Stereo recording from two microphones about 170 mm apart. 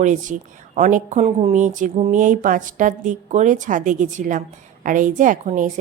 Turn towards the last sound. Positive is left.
turn(degrees=-50)  # may be behind; listen again after turning